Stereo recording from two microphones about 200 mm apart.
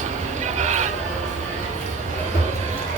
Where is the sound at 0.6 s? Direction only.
35° right (ahead or behind).